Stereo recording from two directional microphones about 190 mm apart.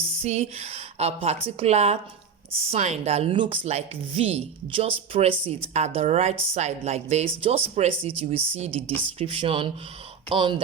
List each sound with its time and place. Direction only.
0.2 s speech: 35° right (ahead or behind)